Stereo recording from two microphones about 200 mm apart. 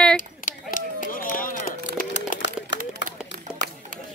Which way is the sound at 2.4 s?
65° left (ahead or behind).